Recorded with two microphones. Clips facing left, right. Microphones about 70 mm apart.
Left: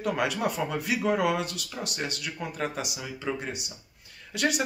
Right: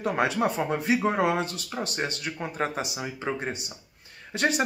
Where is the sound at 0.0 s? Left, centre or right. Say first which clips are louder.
Right 3 dB; right.